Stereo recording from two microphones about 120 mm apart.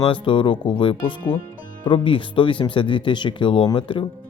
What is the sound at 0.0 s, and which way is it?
Speech, 45° left (ahead or behind).